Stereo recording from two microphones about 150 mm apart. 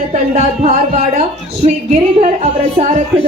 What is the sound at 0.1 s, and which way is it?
Speech, 50° right (ahead or behind).